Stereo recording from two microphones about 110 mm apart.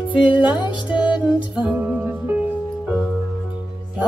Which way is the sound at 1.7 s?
10° right (ahead or behind).